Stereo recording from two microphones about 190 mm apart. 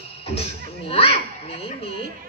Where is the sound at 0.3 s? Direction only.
30° left (ahead or behind).